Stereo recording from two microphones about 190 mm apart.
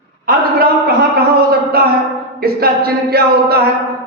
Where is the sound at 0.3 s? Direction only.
50° right (ahead or behind).